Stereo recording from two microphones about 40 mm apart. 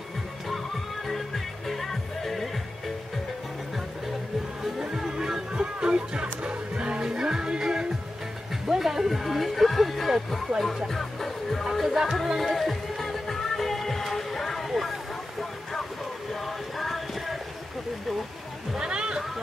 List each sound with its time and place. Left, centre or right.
1.7 s music: centre
4.7 s music: centre
5.5 s music: right
7.1 s music: centre
8.6 s speech: centre
10.9 s music: centre
11.7 s speech: centre
12.4 s music: centre
14.7 s speech: centre
16.4 s a sound: centre
18.8 s a sound: right